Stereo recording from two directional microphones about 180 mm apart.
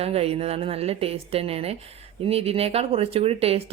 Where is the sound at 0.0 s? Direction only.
35° right (ahead or behind).